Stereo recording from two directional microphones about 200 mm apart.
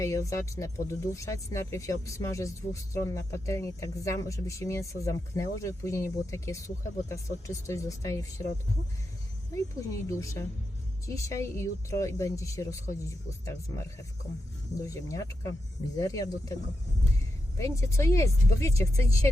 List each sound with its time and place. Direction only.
0.0 s speech: 15° left (ahead or behind)
10.1 s speech: 15° left (ahead or behind)
17.6 s speech: 15° left (ahead or behind)